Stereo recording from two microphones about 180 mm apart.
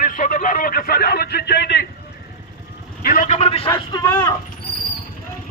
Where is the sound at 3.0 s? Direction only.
50° left (ahead or behind).